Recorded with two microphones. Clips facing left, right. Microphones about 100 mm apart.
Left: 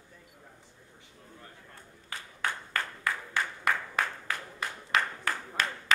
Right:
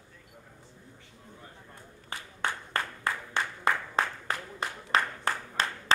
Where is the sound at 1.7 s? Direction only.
25° right (ahead or behind).